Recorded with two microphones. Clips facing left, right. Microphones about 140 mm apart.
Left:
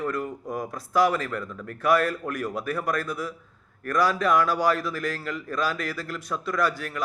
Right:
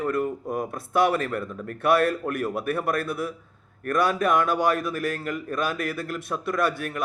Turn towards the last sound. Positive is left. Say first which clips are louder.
# right 1 dB
turn(degrees=-25)  # may be behind; listen again after turning